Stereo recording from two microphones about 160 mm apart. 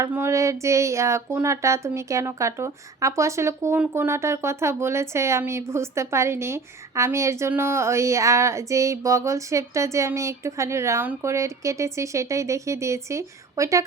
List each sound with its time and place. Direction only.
0.0 s speech: 15° right (ahead or behind)